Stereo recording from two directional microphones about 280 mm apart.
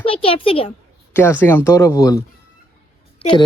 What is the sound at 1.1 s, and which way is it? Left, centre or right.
A woman's voice, centre.